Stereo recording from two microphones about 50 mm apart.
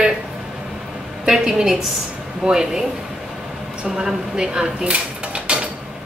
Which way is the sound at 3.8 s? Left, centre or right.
Centre.